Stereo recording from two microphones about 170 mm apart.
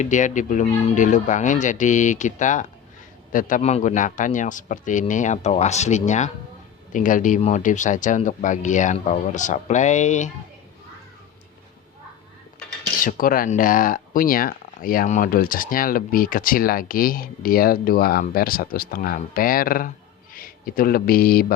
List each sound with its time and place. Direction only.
0.0 s speech: 45° left (ahead or behind)
13.1 s speech: 55° left (ahead or behind)